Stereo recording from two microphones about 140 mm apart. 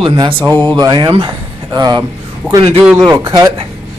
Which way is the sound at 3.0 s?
30° right (ahead or behind).